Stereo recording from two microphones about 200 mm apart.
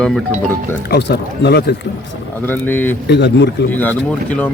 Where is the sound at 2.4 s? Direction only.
10° left (ahead or behind).